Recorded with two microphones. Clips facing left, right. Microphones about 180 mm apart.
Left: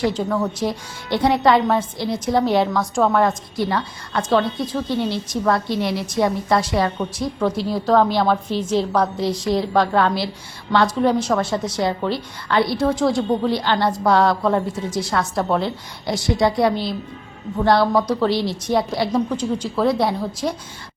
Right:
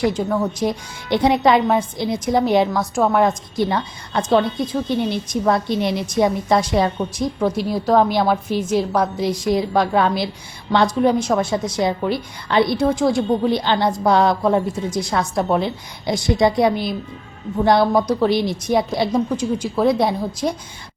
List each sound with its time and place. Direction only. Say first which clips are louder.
0.0 s a woman's voice: right 1 dB; 10° right (ahead or behind)